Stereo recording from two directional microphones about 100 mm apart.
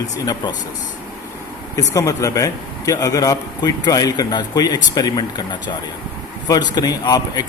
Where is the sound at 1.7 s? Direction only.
35° left (ahead or behind).